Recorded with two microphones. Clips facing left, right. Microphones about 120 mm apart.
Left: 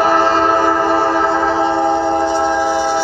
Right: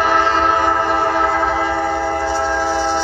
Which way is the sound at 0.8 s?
30° left (ahead or behind).